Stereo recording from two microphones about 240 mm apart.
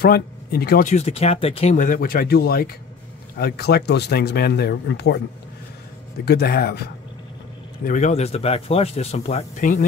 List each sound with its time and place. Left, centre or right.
0.0 s speech: left
6.2 s speech: left
7.8 s speech: left